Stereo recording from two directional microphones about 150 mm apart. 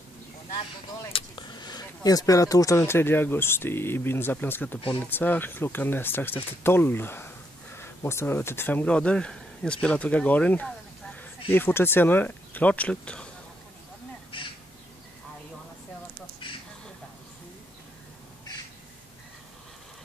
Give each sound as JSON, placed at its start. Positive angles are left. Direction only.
{"t": 1.1, "sound": "speech", "side_deg": 30}